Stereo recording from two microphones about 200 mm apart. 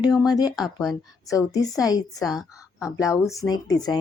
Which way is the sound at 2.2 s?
Centre (ahead or behind).